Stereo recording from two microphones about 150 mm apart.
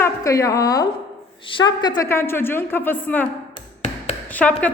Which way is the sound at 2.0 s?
15° left (ahead or behind).